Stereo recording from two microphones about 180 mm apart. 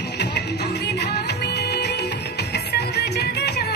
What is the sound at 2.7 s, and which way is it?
Music, 65° left (ahead or behind).